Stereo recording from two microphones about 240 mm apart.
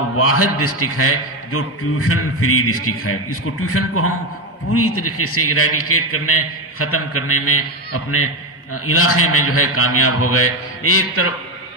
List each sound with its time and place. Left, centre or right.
0.2 s a man's voice: left